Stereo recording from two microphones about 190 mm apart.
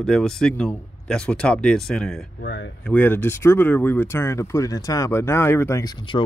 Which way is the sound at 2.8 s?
10° left (ahead or behind).